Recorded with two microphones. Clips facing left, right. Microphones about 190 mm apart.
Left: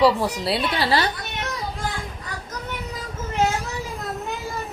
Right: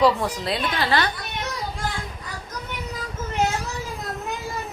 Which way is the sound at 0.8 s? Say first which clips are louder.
Even; 35° left (ahead or behind).